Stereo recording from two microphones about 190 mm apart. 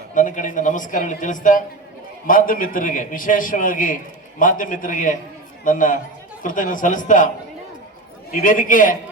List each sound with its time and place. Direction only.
0.1 s a man's voice: 45° left (ahead or behind)
8.3 s a man's voice: 45° left (ahead or behind)